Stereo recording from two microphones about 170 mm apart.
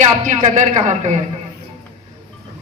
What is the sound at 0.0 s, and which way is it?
A woman's voice, 45° right (ahead or behind).